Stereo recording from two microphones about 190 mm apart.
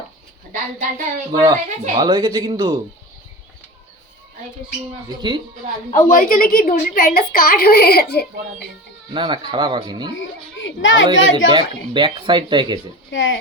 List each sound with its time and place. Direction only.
0.5 s a woman's voice: 40° right (ahead or behind)
2.0 s speech: 15° right (ahead or behind)
5.0 s speech: 25° right (ahead or behind)
5.9 s a woman's voice: 45° left (ahead or behind)
9.1 s speech: 25° right (ahead or behind)
10.2 s speech: 80° left
11.5 s speech: 25° right (ahead or behind)
13.1 s speech: 75° left (ahead or behind)